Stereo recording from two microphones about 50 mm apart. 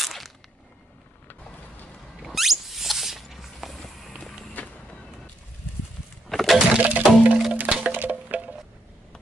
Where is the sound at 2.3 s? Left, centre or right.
Centre.